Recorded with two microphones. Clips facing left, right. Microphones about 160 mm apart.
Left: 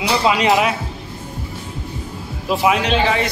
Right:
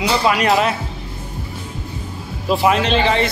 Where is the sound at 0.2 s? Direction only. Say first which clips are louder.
Left 2 dB; 20° left (ahead or behind).